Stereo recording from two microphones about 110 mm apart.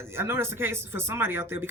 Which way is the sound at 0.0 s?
25° right (ahead or behind).